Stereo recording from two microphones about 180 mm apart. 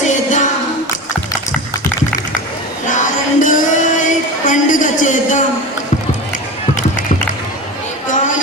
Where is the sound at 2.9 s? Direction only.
45° left (ahead or behind).